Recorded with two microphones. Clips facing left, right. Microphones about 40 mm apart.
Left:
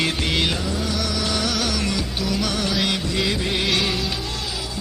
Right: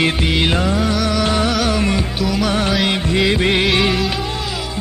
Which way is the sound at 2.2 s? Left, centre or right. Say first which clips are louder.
Right 5 dB; centre.